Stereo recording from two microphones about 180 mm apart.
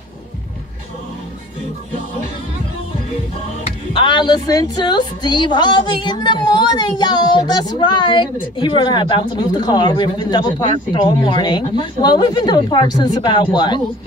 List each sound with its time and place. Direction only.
3.9 s a woman's voice: 25° left (ahead or behind)